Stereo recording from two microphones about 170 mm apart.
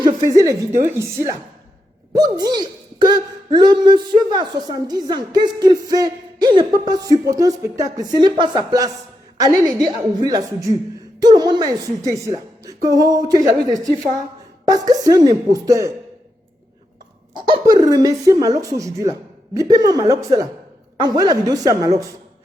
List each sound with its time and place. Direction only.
0.0 s speech: 20° right (ahead or behind)
17.3 s speech: 25° right (ahead or behind)